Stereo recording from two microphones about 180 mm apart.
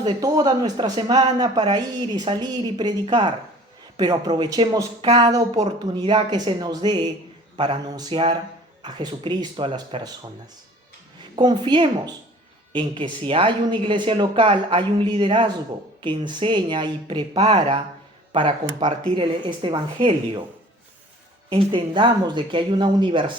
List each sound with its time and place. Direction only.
0.0 s speech: 20° right (ahead or behind)
11.3 s speech: 25° right (ahead or behind)
21.5 s speech: 25° right (ahead or behind)